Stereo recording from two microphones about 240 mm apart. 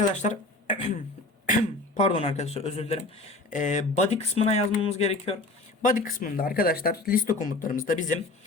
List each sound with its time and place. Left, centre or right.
0.1 s speech: left
1.5 s speech: left